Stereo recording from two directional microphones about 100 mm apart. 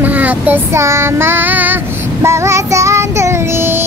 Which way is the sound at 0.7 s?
25° right (ahead or behind).